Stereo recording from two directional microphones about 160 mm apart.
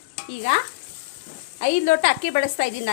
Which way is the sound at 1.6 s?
60° left (ahead or behind).